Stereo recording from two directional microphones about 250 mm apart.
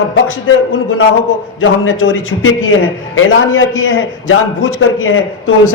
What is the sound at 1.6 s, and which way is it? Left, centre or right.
A man's voice, left.